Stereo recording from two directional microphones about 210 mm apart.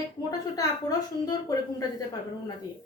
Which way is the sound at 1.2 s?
20° left (ahead or behind).